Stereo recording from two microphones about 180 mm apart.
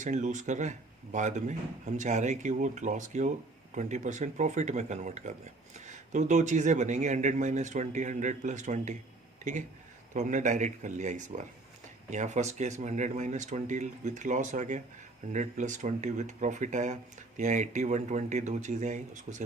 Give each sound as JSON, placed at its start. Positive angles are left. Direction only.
{"t": 0.0, "sound": "speech", "side_deg": -40}